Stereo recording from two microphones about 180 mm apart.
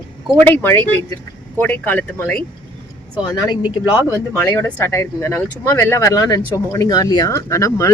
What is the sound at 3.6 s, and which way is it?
Speech, 10° right (ahead or behind).